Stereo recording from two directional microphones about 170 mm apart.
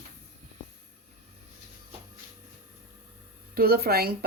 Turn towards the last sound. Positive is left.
turn(degrees=-65)  # may be behind; listen again after turning